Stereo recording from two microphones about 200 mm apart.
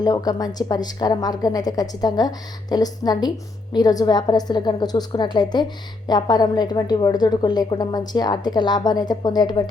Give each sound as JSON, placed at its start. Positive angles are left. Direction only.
{"t": 0.0, "sound": "a woman's voice", "side_deg": 20}